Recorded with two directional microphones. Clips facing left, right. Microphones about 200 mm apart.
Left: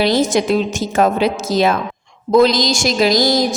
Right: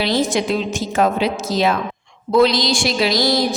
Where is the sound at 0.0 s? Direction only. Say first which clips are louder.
Left 4 dB; 45° left (ahead or behind).